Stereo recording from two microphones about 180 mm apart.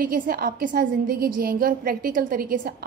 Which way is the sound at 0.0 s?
55° right (ahead or behind).